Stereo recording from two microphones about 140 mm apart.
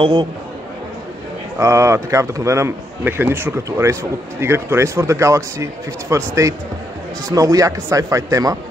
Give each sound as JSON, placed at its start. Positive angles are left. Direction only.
{"t": 0.0, "sound": "speech", "side_deg": -35}
{"t": 1.6, "sound": "a man's voice", "side_deg": -20}